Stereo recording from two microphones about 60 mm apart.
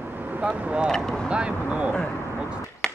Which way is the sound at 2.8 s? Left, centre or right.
Centre.